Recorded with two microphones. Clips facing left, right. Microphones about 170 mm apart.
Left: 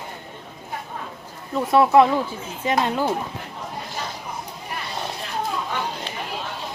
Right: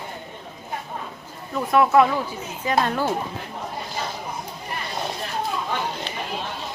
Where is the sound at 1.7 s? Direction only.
25° left (ahead or behind).